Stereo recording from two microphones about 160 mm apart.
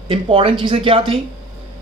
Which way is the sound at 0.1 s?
35° right (ahead or behind).